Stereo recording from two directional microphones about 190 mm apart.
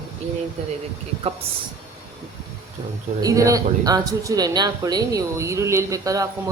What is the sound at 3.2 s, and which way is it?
Speech, 20° right (ahead or behind).